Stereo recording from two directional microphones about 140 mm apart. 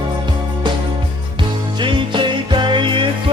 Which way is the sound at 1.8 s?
35° right (ahead or behind).